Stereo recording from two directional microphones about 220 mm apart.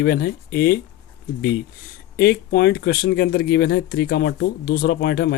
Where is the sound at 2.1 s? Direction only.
45° left (ahead or behind).